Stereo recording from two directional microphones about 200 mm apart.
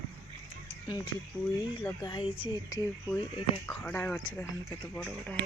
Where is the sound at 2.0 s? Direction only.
25° left (ahead or behind); by 5.4 s 5° left (ahead or behind).